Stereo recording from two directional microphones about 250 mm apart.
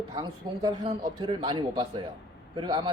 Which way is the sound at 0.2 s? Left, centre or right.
Centre.